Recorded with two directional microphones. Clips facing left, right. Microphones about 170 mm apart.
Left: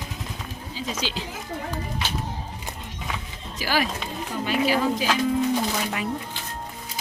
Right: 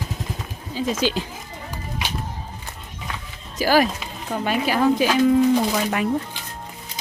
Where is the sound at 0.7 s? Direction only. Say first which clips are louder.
Right 8 dB; 50° right (ahead or behind).